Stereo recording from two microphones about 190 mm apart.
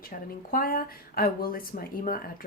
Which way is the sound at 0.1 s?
50° left (ahead or behind).